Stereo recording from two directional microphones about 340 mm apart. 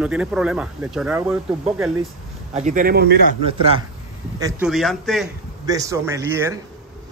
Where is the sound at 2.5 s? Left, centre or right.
Right.